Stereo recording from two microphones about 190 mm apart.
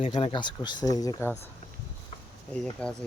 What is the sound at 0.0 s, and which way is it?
Speech, 30° left (ahead or behind).